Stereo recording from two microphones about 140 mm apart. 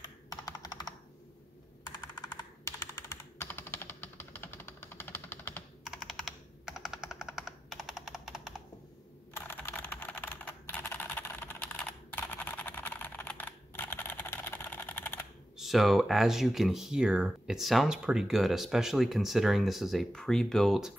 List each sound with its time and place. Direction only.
0.0 s computer keyboard: 30° left (ahead or behind)
1.9 s a sound: 30° left (ahead or behind)
5.9 s computer keyboard: centre (ahead or behind)
6.8 s machine gun: 5° right (ahead or behind)
9.3 s typing: 15° left (ahead or behind)
15.5 s speech: centre (ahead or behind)